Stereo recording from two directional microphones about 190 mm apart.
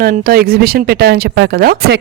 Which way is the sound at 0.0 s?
50° right (ahead or behind).